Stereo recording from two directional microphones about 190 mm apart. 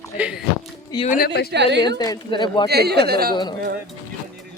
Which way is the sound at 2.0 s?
20° left (ahead or behind).